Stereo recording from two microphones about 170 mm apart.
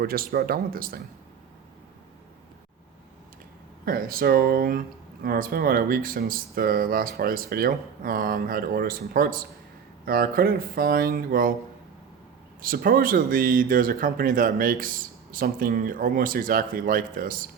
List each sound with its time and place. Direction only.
0.0 s speech: 60° right (ahead or behind)
3.8 s speech: 60° right (ahead or behind)
12.6 s speech: 60° right (ahead or behind)